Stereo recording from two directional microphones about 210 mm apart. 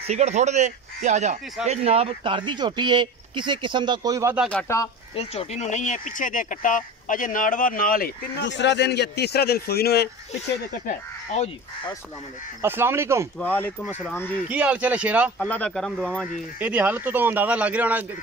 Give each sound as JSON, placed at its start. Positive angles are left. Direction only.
{"t": 0.0, "sound": "speech", "side_deg": -30}
{"t": 4.5, "sound": "speech", "side_deg": 10}
{"t": 5.1, "sound": "speech", "side_deg": 30}
{"t": 10.9, "sound": "speech", "side_deg": 30}
{"t": 12.6, "sound": "speech", "side_deg": -10}
{"t": 13.4, "sound": "speech", "side_deg": 10}
{"t": 14.5, "sound": "speech", "side_deg": -5}
{"t": 15.3, "sound": "speech", "side_deg": 5}
{"t": 16.5, "sound": "speech", "side_deg": -5}